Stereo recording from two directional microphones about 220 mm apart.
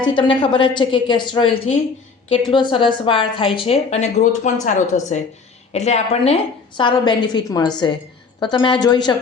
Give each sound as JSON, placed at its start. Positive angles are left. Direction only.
{"t": 0.0, "sound": "a woman's voice", "side_deg": 20}